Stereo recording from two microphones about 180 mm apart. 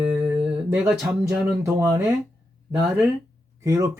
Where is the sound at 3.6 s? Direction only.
20° right (ahead or behind).